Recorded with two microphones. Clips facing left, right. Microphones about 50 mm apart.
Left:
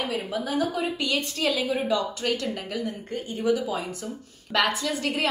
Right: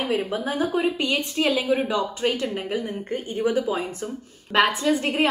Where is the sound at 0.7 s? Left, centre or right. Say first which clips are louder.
Right 5 dB; right.